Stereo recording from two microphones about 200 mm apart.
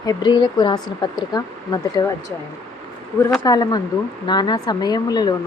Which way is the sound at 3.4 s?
20° left (ahead or behind).